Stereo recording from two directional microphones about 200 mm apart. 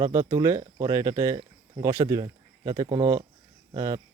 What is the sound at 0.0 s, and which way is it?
Speech, 15° right (ahead or behind).